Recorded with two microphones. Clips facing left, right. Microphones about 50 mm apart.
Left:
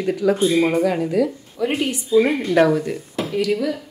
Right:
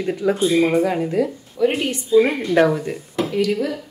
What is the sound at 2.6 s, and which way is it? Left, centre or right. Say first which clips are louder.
Speech: left 1 dB; centre.